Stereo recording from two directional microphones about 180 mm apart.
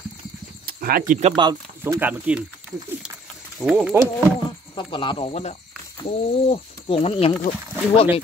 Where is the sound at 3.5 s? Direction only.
5° right (ahead or behind).